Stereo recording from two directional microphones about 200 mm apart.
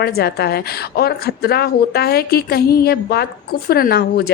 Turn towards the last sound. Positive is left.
turn(degrees=50)  # may be behind; listen again after turning